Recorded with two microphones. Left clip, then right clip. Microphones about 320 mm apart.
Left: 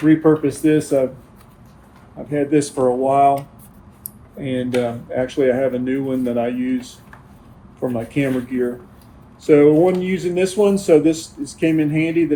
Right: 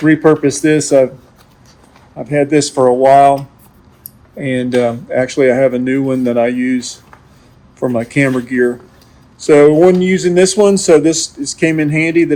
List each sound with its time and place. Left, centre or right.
0.0 s speech: right
2.3 s speech: right
4.4 s speech: right